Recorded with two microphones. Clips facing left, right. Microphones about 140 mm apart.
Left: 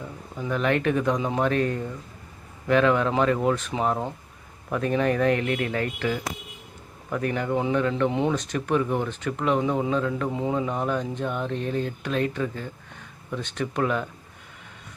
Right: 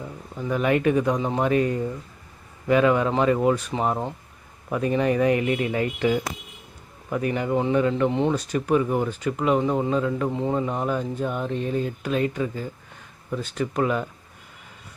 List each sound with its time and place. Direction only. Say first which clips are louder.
0.3 s speech: right 2 dB; 5° right (ahead or behind)
7.1 s speech: right 2 dB; 5° right (ahead or behind)